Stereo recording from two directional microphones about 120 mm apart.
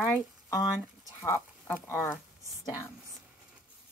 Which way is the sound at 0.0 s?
25° left (ahead or behind).